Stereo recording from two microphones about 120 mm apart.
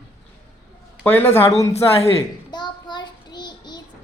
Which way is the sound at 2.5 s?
40° left (ahead or behind).